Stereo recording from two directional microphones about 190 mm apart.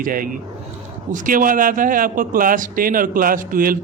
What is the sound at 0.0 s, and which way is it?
A man's voice, 50° right (ahead or behind).